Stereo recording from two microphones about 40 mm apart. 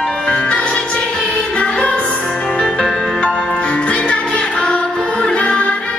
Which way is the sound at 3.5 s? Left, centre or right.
Left.